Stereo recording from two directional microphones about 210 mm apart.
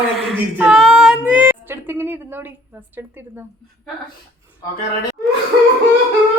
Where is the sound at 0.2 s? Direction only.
Centre (ahead or behind).